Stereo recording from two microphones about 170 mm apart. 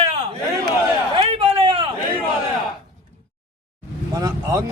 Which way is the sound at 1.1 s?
30° right (ahead or behind).